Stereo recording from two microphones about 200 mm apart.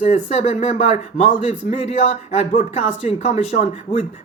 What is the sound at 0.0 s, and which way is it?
Speech, 35° left (ahead or behind).